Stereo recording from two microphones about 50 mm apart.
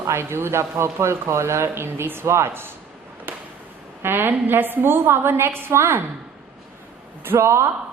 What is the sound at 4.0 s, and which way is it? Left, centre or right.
A woman's voice, right.